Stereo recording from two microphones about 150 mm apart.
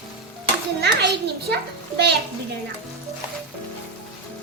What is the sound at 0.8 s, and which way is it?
Speech, 90° right.